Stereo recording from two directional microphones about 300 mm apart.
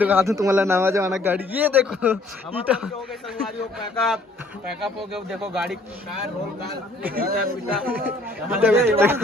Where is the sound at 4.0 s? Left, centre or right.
Centre.